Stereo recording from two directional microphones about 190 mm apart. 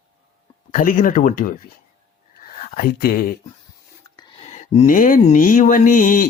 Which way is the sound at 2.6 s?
50° left (ahead or behind).